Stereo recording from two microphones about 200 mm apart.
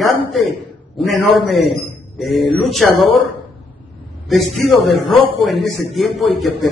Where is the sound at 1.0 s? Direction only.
Centre (ahead or behind).